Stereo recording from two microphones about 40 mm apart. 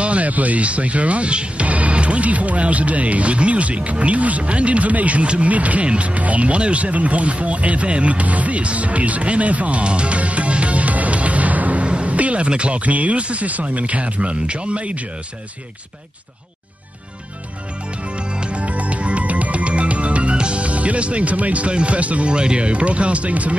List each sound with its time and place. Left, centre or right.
0.0 s speech: right
18.0 s music: right